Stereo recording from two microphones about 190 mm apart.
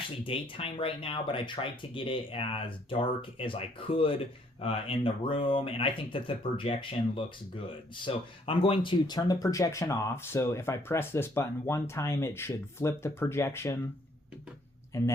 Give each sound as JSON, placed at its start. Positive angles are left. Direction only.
{"t": 0.3, "sound": "speech", "side_deg": 30}
{"t": 8.0, "sound": "speech", "side_deg": 30}
{"t": 14.9, "sound": "speech", "side_deg": 15}